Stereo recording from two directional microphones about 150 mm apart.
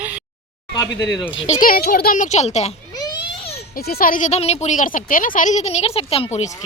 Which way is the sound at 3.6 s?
90° left.